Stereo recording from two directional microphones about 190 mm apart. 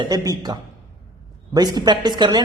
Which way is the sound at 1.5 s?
20° right (ahead or behind).